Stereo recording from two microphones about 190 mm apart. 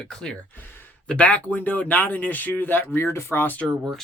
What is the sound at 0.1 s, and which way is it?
Speech, 5° left (ahead or behind).